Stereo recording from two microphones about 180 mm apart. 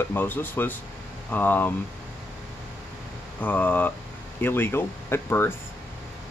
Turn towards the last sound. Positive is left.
turn(degrees=15)  # may be behind; listen again after turning